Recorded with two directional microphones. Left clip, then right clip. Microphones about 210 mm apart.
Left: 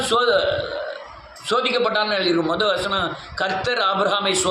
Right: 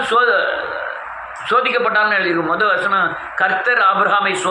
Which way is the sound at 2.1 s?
30° left (ahead or behind).